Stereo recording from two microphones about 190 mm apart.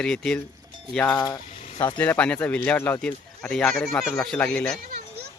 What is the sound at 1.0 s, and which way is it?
Speech, 20° left (ahead or behind).